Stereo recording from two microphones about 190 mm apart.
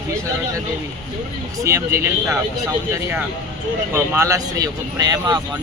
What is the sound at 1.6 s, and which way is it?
Speech, 15° right (ahead or behind).